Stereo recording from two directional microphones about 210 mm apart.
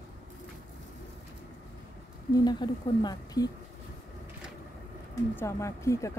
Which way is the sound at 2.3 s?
20° left (ahead or behind).